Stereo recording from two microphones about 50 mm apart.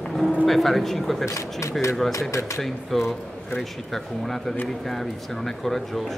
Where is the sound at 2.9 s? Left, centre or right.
Centre.